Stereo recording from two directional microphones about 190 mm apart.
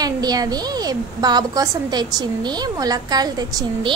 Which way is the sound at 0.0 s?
20° right (ahead or behind).